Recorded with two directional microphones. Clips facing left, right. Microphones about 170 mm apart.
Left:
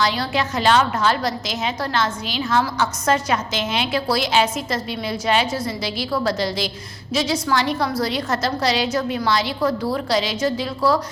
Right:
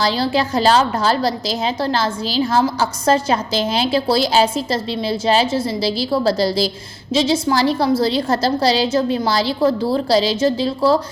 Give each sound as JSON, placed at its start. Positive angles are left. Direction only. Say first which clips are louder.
{"t": 0.0, "sound": "a woman's voice", "louder": "right 4 dB", "side_deg": -30}